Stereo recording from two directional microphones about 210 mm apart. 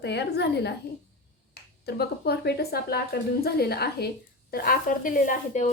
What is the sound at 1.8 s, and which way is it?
A woman's voice, 50° left (ahead or behind).